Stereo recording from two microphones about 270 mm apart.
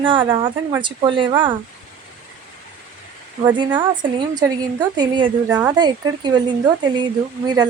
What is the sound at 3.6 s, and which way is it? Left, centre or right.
Speech, centre.